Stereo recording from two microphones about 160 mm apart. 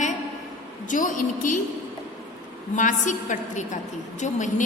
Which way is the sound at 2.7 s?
50° left (ahead or behind).